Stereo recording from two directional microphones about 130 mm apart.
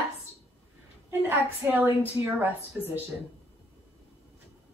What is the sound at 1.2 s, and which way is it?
A woman's voice, 15° right (ahead or behind).